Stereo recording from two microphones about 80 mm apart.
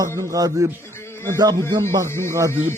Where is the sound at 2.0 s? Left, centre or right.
Left.